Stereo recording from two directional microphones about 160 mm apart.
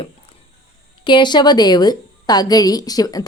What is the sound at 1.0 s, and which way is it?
A woman's voice, 30° left (ahead or behind).